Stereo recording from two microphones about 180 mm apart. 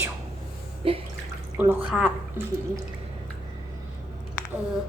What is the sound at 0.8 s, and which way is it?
Bathtub, 30° right (ahead or behind).